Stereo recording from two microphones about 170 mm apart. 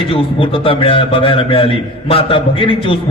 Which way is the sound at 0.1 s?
30° left (ahead or behind).